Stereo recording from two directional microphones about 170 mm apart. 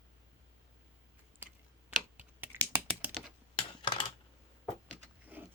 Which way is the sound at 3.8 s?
30° left (ahead or behind).